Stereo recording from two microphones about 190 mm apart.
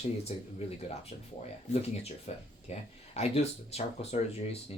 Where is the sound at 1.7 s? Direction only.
40° left (ahead or behind).